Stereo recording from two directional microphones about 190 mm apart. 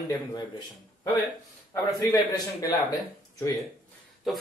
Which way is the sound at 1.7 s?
15° left (ahead or behind).